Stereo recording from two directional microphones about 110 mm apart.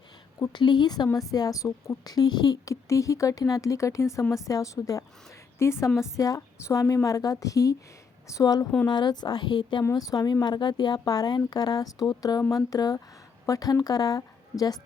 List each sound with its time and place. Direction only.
0.5 s a woman's voice: 45° left (ahead or behind)
2.6 s a woman's voice: 30° left (ahead or behind); by 9.8 s 45° left (ahead or behind)
9.9 s speech: 35° left (ahead or behind)